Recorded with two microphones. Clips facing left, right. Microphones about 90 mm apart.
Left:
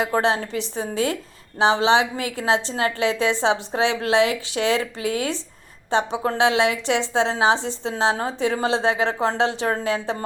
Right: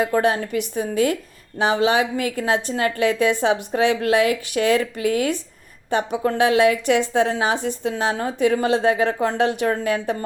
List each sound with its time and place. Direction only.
0.1 s a woman's voice: 25° left (ahead or behind)